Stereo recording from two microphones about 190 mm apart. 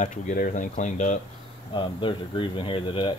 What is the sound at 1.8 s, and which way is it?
Speech, 25° left (ahead or behind).